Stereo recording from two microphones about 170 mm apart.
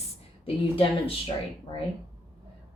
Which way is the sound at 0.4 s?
35° left (ahead or behind).